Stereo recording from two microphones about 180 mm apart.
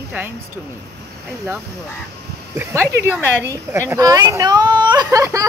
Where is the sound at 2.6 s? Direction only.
10° right (ahead or behind).